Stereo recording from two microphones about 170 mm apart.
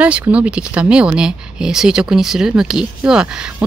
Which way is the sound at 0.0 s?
10° right (ahead or behind).